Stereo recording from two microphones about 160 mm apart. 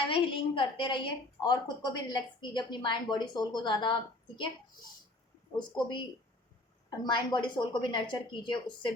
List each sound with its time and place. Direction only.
0.1 s a woman's voice: 30° left (ahead or behind)
5.5 s a woman's voice: 30° left (ahead or behind)